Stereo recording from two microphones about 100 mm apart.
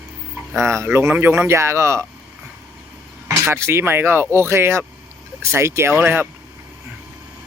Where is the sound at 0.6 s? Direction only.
25° right (ahead or behind).